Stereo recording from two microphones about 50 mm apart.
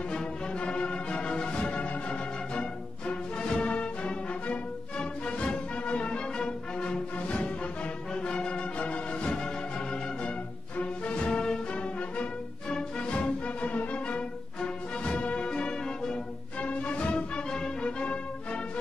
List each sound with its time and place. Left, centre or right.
0.1 s music: left
10.8 s music: left